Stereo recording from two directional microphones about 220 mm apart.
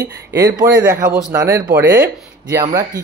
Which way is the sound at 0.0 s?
15° right (ahead or behind).